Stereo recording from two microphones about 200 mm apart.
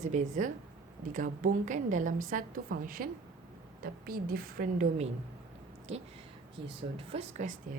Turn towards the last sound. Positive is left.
turn(degrees=-35)  # may be behind; listen again after turning